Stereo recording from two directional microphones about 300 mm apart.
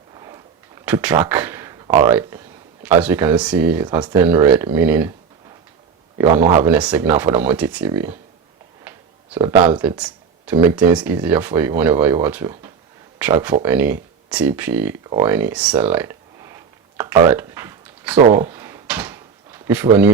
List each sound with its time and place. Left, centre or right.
0.9 s speech: centre
1.3 s a sound: centre
2.0 s speech: centre
6.4 s speech: right
6.7 s speech: centre
18.3 s drawer open or close: centre